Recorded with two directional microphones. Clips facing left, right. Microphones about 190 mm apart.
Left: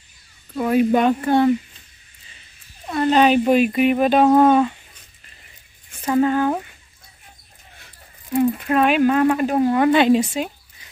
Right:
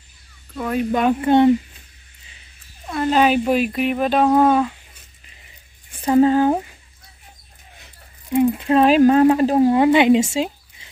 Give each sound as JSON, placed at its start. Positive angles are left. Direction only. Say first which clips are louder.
{"t": 0.6, "sound": "speech", "louder": "left 4 dB", "side_deg": 10}
{"t": 1.2, "sound": "speech", "louder": "right 3 dB", "side_deg": -20}
{"t": 2.9, "sound": "dog", "louder": "left 1 dB", "side_deg": -5}
{"t": 3.4, "sound": "speech", "louder": "left 3 dB", "side_deg": 0}
{"t": 5.9, "sound": "speech", "louder": "right 4 dB", "side_deg": -30}
{"t": 8.3, "sound": "speech", "louder": "right 2 dB", "side_deg": -20}